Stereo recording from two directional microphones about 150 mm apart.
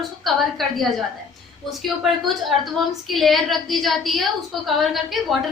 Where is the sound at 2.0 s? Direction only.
Centre (ahead or behind).